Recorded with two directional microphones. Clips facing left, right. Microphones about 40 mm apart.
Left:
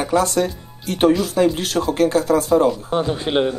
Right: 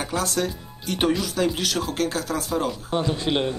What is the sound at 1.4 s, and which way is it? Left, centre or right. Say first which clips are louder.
Speech: left 7 dB; centre.